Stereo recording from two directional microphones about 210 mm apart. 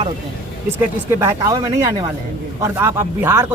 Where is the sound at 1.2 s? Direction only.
15° right (ahead or behind).